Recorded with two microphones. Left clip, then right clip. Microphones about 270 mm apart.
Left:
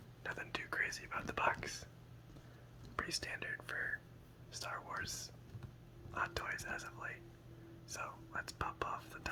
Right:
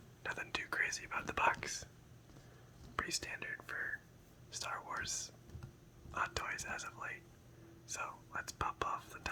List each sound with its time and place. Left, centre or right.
0.2 s whispering: centre
2.9 s speech: centre